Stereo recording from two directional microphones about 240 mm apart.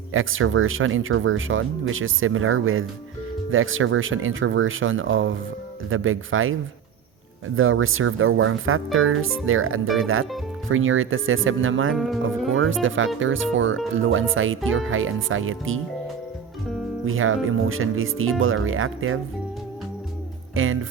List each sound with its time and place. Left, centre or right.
0.1 s speech: right
11.9 s speech: centre
12.5 s speech: right
17.1 s speech: right
20.6 s speech: right